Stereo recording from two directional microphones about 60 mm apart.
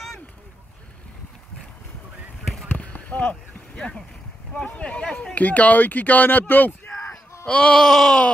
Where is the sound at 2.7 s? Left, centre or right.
Left.